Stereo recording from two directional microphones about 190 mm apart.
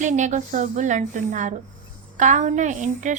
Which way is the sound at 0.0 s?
40° right (ahead or behind).